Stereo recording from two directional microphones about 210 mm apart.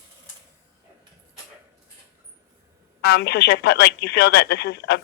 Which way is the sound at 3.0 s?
50° left (ahead or behind).